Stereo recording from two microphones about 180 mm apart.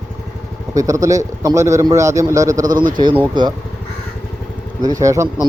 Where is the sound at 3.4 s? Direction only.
25° right (ahead or behind).